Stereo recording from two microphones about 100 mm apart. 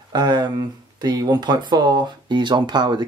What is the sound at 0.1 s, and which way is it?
Speech, 45° right (ahead or behind).